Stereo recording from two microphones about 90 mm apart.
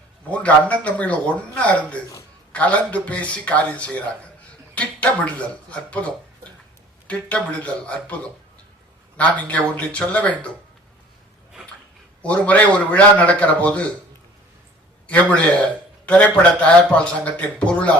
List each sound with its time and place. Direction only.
0.3 s a man's voice: 15° left (ahead or behind)
4.7 s a sound: 15° left (ahead or behind)
5.7 s a man's voice: 15° left (ahead or behind)
12.2 s a man's voice: 15° left (ahead or behind)
15.0 s a man's voice: 15° left (ahead or behind)